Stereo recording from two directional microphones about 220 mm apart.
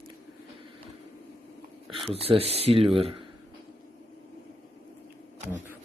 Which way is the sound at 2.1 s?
25° right (ahead or behind).